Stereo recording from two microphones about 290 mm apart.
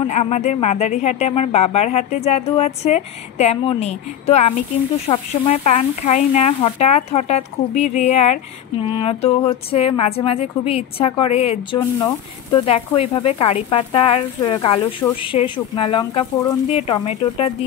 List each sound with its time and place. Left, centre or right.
0.0 s speech: left